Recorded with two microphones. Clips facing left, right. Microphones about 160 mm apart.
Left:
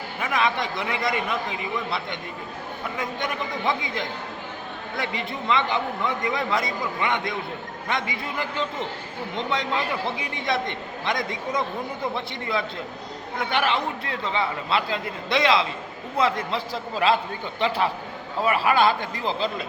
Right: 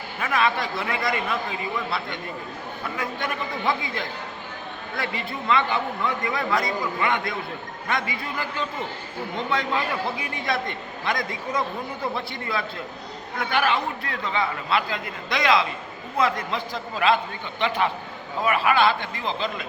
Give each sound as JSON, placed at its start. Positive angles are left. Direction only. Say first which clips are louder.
{"t": 0.2, "sound": "a man's voice", "louder": "right 1 dB", "side_deg": 20}
{"t": 10.2, "sound": "a man's voice", "louder": "left 1 dB", "side_deg": 20}